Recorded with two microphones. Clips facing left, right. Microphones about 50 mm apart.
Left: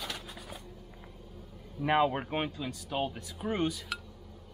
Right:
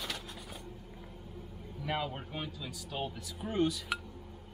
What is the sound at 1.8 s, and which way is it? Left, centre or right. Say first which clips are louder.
Speech: left 9 dB; left.